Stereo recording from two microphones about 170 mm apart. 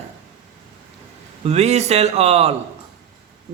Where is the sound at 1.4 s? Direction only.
40° right (ahead or behind).